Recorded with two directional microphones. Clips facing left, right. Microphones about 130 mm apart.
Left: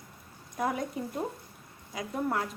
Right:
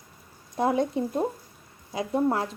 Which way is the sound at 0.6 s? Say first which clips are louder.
Right 7 dB; 30° right (ahead or behind).